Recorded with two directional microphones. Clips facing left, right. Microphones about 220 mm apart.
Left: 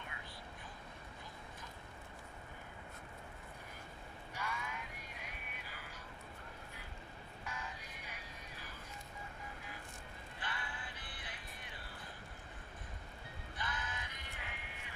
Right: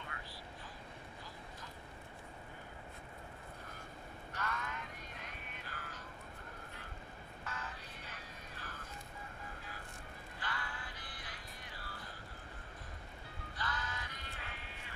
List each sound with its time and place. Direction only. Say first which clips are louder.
4.3 s a sound: right 2 dB; 10° left (ahead or behind)
7.4 s vehicle: even; 15° left (ahead or behind)
10.4 s music: right 1 dB; 20° left (ahead or behind)
13.6 s music: right 2 dB; 20° left (ahead or behind)